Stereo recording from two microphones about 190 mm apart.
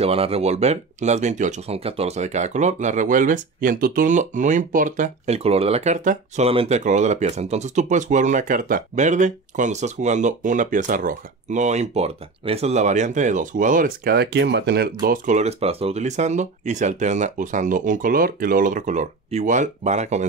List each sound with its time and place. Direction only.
0.0 s speech: 30° right (ahead or behind)